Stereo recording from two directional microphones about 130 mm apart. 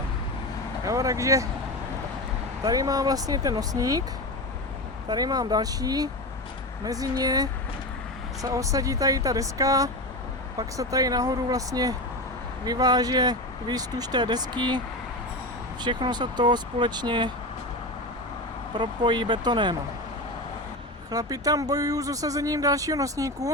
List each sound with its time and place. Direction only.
0.9 s speech: 25° right (ahead or behind)
2.6 s speech: 30° right (ahead or behind)
5.0 s speech: 30° right (ahead or behind)
15.8 s speech: 35° right (ahead or behind)
18.7 s speech: 35° right (ahead or behind)
21.1 s speech: 30° right (ahead or behind)